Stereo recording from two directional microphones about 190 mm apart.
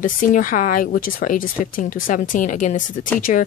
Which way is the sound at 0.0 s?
45° left (ahead or behind).